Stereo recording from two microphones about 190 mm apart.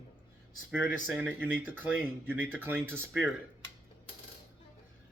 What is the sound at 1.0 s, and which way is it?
Speech, 10° right (ahead or behind).